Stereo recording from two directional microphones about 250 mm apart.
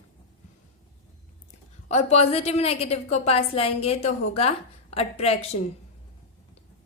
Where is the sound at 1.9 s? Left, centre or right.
Left.